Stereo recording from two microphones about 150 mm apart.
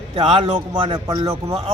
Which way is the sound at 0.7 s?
30° right (ahead or behind).